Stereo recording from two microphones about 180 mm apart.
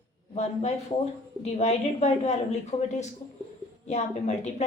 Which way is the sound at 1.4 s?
40° left (ahead or behind).